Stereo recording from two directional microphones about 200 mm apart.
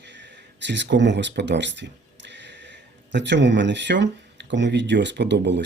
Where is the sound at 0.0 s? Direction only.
60° right (ahead or behind).